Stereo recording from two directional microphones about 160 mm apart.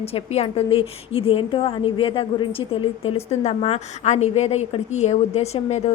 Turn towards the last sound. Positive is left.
turn(degrees=40)  # may be behind; listen again after turning